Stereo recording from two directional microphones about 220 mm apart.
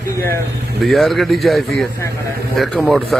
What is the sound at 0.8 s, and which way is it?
A man's voice, centre (ahead or behind).